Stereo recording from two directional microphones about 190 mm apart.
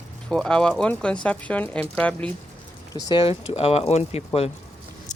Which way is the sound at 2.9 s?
25° left (ahead or behind).